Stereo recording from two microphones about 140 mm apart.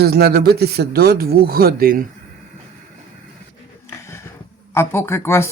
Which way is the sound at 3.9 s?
20° left (ahead or behind).